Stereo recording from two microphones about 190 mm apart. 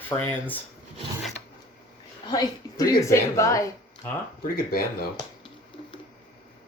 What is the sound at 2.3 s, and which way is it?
Speech, 20° left (ahead or behind).